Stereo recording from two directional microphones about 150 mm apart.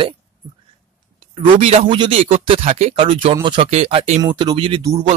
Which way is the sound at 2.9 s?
40° right (ahead or behind).